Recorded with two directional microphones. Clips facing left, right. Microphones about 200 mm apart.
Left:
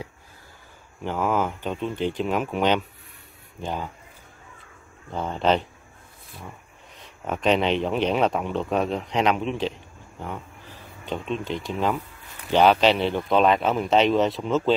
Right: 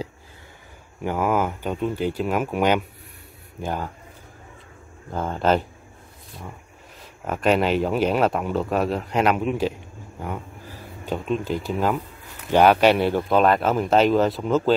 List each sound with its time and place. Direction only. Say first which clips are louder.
1.0 s speech: right 2 dB; 10° right (ahead or behind)
5.1 s speech: right 1 dB; 5° right (ahead or behind)
7.0 s speech: right 1 dB; 5° right (ahead or behind)